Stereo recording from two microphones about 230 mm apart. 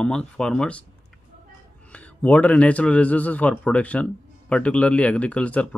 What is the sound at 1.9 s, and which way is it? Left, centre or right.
Speech, centre.